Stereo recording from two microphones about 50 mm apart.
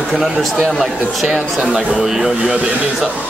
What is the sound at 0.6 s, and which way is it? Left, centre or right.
Speech, centre.